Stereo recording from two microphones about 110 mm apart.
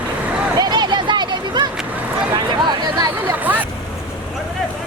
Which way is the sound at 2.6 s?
35° right (ahead or behind).